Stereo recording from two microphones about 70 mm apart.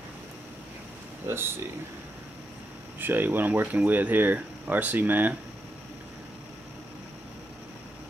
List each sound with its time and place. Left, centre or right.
1.2 s speech: right
3.0 s speech: right